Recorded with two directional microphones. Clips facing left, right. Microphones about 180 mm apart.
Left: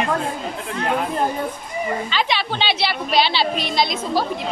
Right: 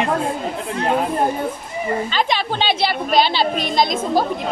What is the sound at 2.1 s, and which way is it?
A woman's voice, 45° right (ahead or behind).